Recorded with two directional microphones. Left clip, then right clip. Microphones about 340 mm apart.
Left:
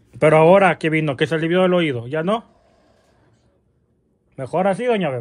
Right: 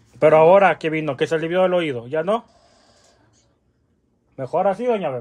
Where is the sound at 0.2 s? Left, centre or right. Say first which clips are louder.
Even; left.